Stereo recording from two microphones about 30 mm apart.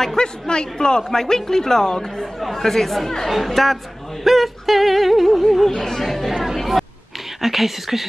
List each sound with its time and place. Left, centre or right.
0.2 s a woman's voice: left; by 6.4 s centre
6.4 s chatter: centre
7.4 s speech: centre